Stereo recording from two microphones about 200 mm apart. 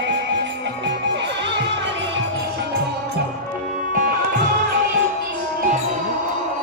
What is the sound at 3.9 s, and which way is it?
Music, 45° right (ahead or behind).